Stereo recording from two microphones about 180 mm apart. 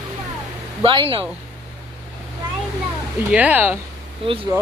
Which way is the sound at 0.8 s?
30° right (ahead or behind).